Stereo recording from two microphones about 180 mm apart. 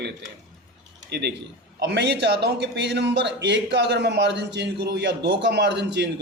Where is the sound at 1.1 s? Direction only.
70° right (ahead or behind).